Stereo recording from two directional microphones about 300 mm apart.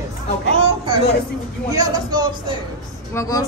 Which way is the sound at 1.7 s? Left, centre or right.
Centre.